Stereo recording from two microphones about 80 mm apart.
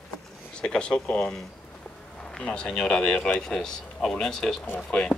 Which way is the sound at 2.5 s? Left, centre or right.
Centre.